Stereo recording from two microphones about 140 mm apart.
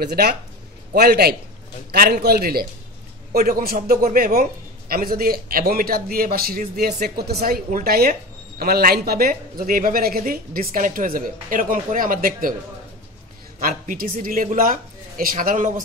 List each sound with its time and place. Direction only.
0.1 s speech: 90° right
2.0 s speech: 90° right
13.6 s speech: 90° right; by 15.8 s 70° right (ahead or behind)